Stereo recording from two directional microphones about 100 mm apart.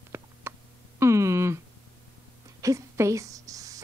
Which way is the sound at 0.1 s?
25° right (ahead or behind).